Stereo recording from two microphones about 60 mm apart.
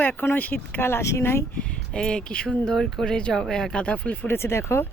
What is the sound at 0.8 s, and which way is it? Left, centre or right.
Speech, left.